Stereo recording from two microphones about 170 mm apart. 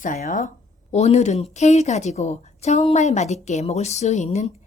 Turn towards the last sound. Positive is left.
turn(degrees=45)  # may be behind; listen again after turning